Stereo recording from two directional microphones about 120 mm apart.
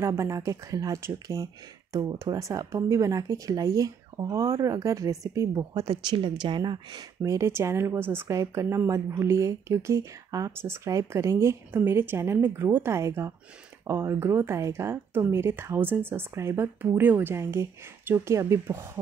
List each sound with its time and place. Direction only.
0.0 s speech: 25° right (ahead or behind)